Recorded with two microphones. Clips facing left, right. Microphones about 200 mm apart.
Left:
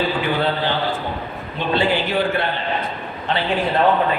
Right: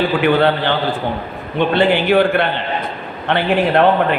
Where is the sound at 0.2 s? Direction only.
65° right (ahead or behind).